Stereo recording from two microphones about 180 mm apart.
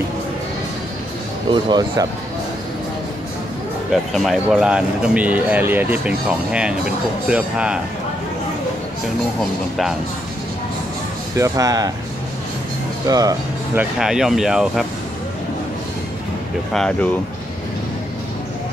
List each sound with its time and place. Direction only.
1.5 s speech: 25° right (ahead or behind)
3.9 s speech: centre (ahead or behind)
9.4 s speech: centre (ahead or behind)
11.3 s speech: 20° right (ahead or behind)
13.1 s speech: 20° right (ahead or behind)
13.9 s speech: 5° right (ahead or behind)
16.7 s speech: 5° left (ahead or behind)